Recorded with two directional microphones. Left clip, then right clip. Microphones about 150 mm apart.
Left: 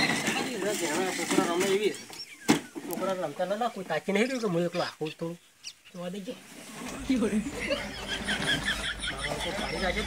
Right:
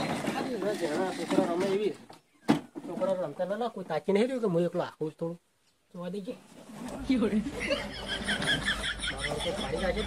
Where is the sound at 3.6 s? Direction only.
30° right (ahead or behind).